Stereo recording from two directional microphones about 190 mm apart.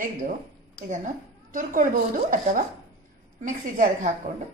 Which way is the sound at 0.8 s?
45° right (ahead or behind).